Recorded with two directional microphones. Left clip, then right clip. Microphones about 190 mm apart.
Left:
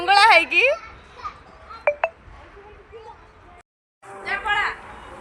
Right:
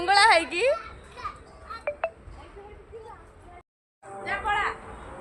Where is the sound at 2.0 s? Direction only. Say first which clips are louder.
Left 6 dB; 5° left (ahead or behind).